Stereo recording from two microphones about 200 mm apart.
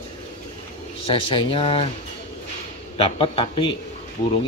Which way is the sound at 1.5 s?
25° left (ahead or behind).